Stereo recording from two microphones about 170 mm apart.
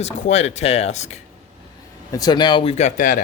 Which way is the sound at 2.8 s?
50° left (ahead or behind).